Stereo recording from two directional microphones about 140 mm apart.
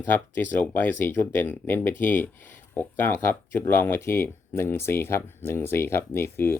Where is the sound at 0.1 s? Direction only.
15° left (ahead or behind).